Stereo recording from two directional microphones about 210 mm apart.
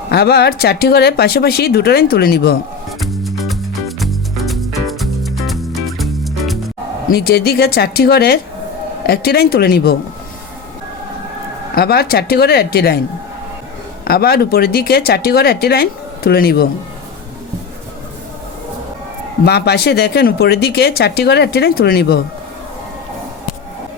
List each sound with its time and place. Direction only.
0.1 s speech: 50° left (ahead or behind)
3.0 s music: centre (ahead or behind)
7.1 s speech: 50° left (ahead or behind)
11.7 s speech: 50° left (ahead or behind)
14.0 s speech: 50° left (ahead or behind)
19.5 s speech: 50° left (ahead or behind)